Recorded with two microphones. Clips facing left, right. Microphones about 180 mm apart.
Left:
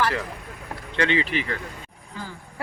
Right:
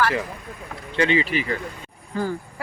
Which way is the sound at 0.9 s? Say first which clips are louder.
Right 3 dB; 10° right (ahead or behind).